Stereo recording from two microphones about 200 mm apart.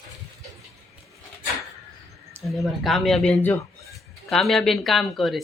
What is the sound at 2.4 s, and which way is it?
Speech, centre (ahead or behind).